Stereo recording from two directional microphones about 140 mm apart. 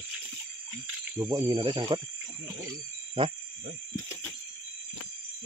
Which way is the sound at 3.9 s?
20° left (ahead or behind).